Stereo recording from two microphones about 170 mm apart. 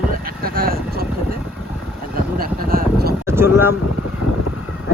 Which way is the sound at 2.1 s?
60° right (ahead or behind).